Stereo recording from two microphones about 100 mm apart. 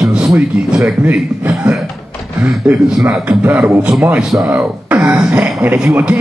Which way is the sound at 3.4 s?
20° right (ahead or behind).